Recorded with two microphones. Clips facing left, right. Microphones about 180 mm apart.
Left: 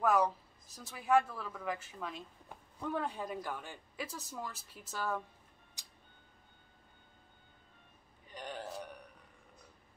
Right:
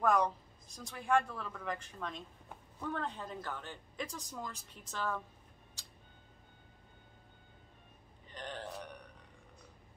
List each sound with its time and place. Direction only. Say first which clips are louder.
0.0 s speech: left 1 dB; 5° left (ahead or behind)
5.8 s tick-tock: right 3 dB; 15° left (ahead or behind)
8.3 s a sound: left 1 dB; 10° left (ahead or behind)